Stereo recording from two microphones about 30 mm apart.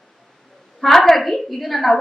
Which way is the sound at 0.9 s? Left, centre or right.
Centre.